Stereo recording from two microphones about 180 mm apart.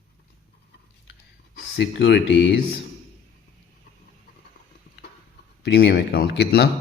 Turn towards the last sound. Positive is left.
turn(degrees=65)  # may be behind; listen again after turning